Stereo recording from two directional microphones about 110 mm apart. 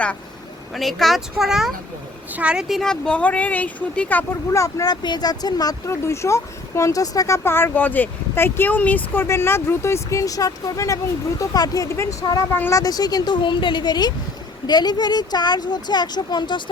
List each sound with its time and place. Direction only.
0.7 s speech: centre (ahead or behind)
4.5 s speech: 30° left (ahead or behind)
12.5 s speech: 20° left (ahead or behind)
12.8 s speech: 35° left (ahead or behind)